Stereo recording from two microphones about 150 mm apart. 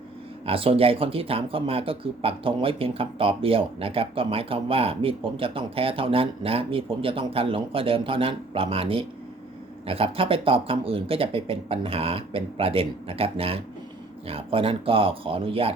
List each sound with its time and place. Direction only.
0.4 s speech: 40° right (ahead or behind)